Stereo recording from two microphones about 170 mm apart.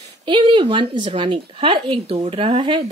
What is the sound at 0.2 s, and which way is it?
A woman's voice, 30° right (ahead or behind).